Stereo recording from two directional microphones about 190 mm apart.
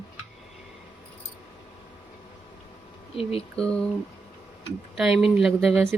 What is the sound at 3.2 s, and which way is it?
Speech, 30° left (ahead or behind).